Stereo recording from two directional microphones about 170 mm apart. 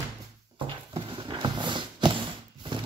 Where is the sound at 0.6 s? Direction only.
30° right (ahead or behind).